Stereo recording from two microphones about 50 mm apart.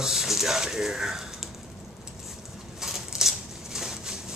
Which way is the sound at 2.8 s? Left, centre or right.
Centre.